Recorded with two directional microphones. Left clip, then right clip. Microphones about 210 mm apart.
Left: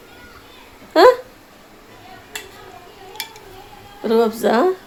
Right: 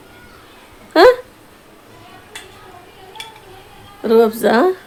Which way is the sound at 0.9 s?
10° right (ahead or behind).